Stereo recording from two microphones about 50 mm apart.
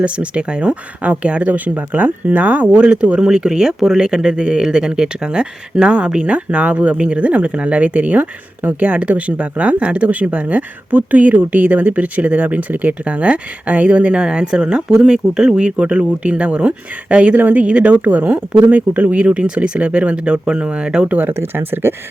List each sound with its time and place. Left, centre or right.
0.0 s speech: right
21.1 s speech: right